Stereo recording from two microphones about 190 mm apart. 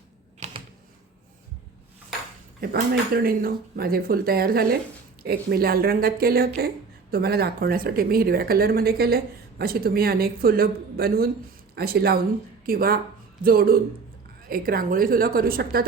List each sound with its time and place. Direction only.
2.6 s speech: 50° right (ahead or behind)